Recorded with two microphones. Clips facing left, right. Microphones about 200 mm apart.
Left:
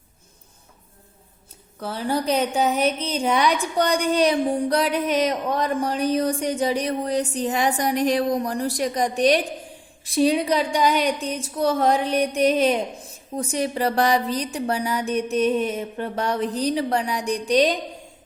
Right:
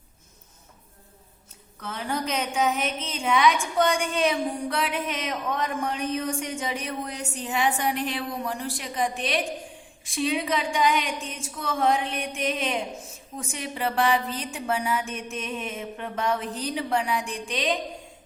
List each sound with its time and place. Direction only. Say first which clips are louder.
1.8 s a woman's voice: left 5 dB; 35° left (ahead or behind)